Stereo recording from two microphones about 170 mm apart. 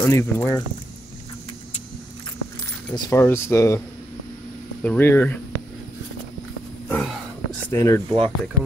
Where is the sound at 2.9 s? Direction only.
25° left (ahead or behind).